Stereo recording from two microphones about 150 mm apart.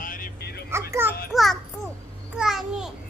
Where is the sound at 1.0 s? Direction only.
15° right (ahead or behind).